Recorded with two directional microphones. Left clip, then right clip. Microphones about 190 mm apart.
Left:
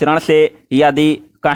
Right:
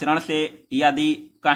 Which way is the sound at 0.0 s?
45° left (ahead or behind).